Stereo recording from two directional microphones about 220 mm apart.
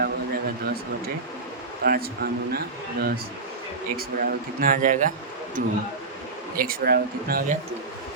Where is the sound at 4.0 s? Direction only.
40° right (ahead or behind).